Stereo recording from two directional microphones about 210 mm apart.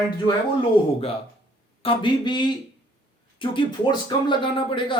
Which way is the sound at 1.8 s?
25° left (ahead or behind).